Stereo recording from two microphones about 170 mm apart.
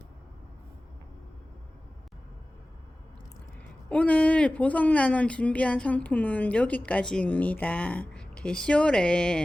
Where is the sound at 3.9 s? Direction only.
10° left (ahead or behind).